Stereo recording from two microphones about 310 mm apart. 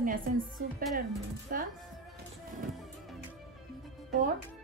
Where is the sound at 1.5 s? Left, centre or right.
Right.